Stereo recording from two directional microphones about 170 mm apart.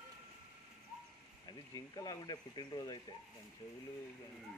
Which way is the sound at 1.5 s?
20° left (ahead or behind).